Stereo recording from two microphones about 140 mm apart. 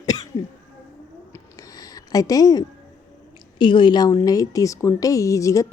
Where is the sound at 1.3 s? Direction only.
25° left (ahead or behind).